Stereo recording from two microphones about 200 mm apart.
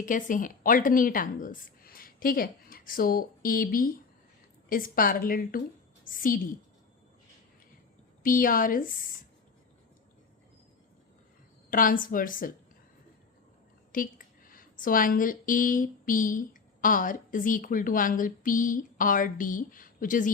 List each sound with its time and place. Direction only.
0.0 s a woman's voice: 40° left (ahead or behind)
8.2 s a woman's voice: 45° left (ahead or behind)
11.7 s a woman's voice: 45° left (ahead or behind)
13.9 s speech: 45° left (ahead or behind)